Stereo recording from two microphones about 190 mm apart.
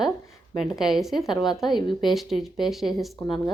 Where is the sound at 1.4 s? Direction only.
20° left (ahead or behind).